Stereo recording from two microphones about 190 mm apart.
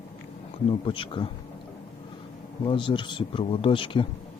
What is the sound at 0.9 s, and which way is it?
Speech, 25° left (ahead or behind).